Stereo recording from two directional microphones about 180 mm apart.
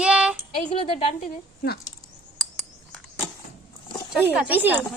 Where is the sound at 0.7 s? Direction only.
30° left (ahead or behind).